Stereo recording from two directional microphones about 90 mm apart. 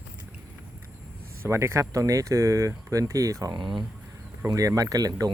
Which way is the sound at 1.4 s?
30° right (ahead or behind).